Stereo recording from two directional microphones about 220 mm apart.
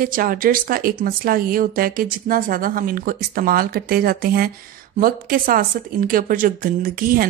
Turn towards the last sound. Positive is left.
turn(degrees=-40)  # may be behind; listen again after turning